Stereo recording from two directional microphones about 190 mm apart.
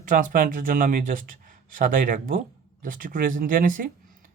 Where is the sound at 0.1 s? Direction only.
50° right (ahead or behind).